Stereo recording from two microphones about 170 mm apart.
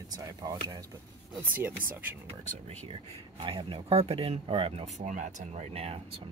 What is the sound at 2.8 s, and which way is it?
Speech, 30° right (ahead or behind).